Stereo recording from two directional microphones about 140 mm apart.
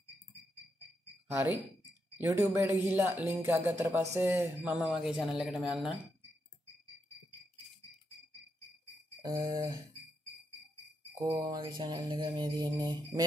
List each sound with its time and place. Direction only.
2.1 s speech: 20° right (ahead or behind); by 5.9 s 5° right (ahead or behind)
9.2 s a sound: 30° right (ahead or behind)
11.2 s mantra: 25° right (ahead or behind)